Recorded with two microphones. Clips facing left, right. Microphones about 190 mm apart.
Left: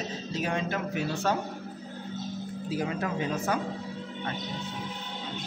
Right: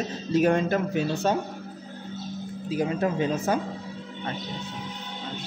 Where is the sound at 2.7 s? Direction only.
20° right (ahead or behind).